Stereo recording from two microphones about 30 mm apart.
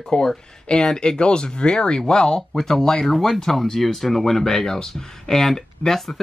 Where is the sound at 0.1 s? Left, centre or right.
Left.